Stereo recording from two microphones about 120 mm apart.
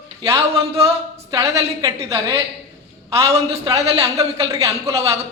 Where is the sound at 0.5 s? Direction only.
55° right (ahead or behind).